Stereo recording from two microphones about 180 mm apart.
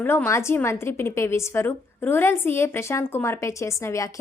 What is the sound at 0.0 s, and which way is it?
A woman's voice, 10° left (ahead or behind).